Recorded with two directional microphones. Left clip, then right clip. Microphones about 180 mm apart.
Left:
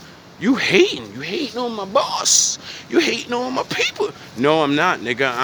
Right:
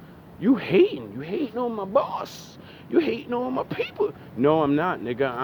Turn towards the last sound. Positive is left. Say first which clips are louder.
# left 7 dB
turn(degrees=25)  # may be behind; listen again after turning